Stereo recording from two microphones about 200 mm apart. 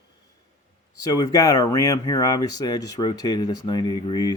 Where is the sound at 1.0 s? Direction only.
20° left (ahead or behind).